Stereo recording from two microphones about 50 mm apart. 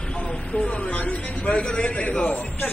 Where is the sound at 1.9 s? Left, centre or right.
Left.